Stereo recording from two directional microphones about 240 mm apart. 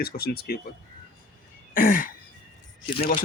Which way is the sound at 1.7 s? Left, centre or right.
Left.